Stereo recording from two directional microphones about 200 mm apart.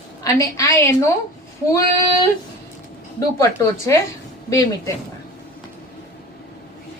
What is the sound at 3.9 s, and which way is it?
Speech, 15° left (ahead or behind).